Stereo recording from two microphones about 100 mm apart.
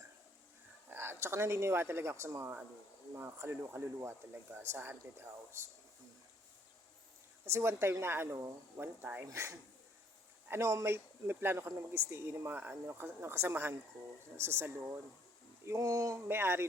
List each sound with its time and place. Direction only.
0.9 s speech: 20° right (ahead or behind)
7.4 s speech: 25° right (ahead or behind)
9.2 s speech: 30° right (ahead or behind)